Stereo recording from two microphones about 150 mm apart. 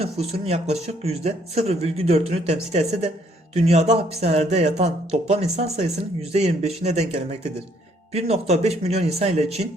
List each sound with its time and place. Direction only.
0.0 s speech: 45° right (ahead or behind)